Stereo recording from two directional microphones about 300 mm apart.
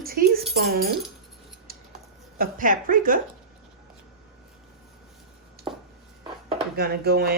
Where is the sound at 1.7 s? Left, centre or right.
Right.